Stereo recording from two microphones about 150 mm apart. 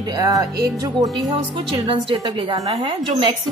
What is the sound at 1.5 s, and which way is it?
A woman's voice, 35° right (ahead or behind).